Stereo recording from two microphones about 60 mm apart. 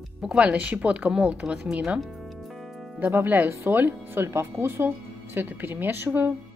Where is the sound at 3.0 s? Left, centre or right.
Right.